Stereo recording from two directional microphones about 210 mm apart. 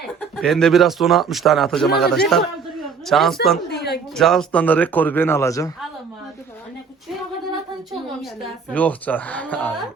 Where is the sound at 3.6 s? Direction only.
50° left (ahead or behind).